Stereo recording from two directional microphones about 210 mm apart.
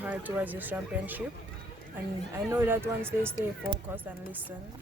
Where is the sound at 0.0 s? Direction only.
10° right (ahead or behind).